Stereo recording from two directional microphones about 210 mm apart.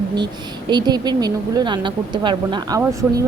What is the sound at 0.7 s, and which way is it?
A woman's voice, 20° right (ahead or behind).